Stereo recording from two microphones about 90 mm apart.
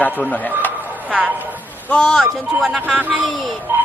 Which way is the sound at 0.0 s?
20° left (ahead or behind).